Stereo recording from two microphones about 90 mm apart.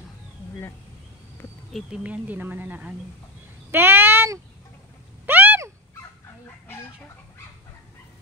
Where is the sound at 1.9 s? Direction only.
15° right (ahead or behind).